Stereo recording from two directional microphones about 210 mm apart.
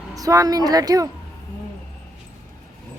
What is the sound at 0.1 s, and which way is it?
Speech, 15° right (ahead or behind).